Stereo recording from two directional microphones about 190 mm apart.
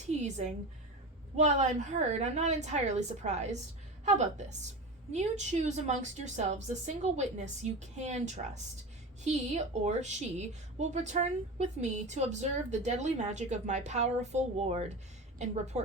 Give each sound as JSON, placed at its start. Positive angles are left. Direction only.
{"t": 0.0, "sound": "a woman's voice", "side_deg": -35}